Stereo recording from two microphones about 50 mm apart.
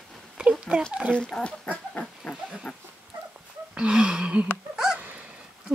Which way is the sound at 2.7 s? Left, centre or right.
Left.